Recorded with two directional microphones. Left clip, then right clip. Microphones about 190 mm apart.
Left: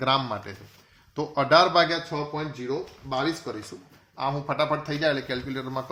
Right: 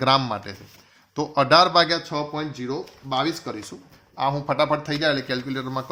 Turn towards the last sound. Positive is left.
turn(degrees=-25)  # may be behind; listen again after turning